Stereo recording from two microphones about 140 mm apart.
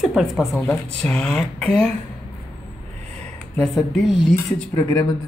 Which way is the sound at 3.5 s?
5° left (ahead or behind).